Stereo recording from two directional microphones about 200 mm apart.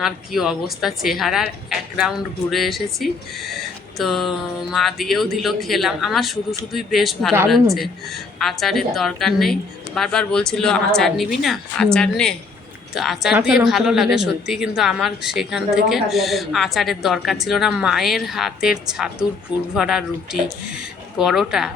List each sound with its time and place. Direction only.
0.0 s a woman's voice: centre (ahead or behind)
21.2 s a woman's voice: centre (ahead or behind)